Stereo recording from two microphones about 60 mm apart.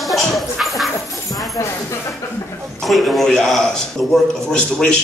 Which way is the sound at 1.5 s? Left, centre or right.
Left.